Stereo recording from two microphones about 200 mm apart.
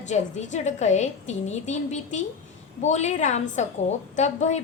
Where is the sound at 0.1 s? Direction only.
35° left (ahead or behind).